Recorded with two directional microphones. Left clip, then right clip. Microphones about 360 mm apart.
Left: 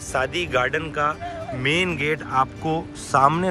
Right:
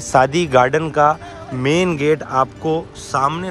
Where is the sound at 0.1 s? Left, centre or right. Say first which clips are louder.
Right 9 dB; centre.